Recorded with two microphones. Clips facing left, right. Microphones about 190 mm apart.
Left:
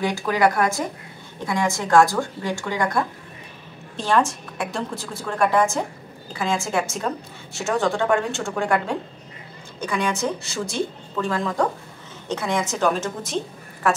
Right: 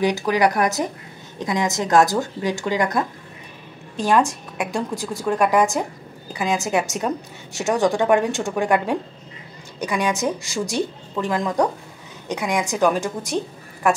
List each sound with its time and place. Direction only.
0.0 s a woman's voice: 20° right (ahead or behind)